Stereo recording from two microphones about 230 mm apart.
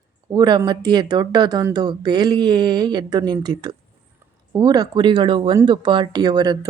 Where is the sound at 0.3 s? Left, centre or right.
Centre.